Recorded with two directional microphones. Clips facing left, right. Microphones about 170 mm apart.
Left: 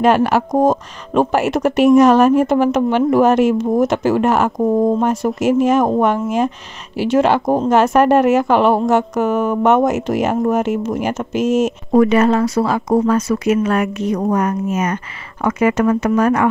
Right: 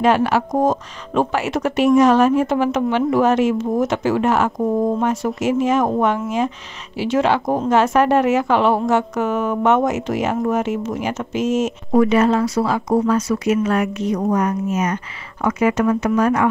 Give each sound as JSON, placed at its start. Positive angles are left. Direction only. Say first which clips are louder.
{"t": 0.0, "sound": "a woman's voice", "louder": "left 3 dB", "side_deg": 45}
{"t": 11.4, "sound": "a woman's voice", "louder": "left 4 dB", "side_deg": 60}